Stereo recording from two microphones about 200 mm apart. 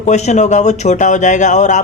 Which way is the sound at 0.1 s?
35° left (ahead or behind).